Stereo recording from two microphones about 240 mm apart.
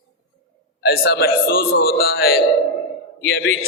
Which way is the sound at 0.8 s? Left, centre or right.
Left.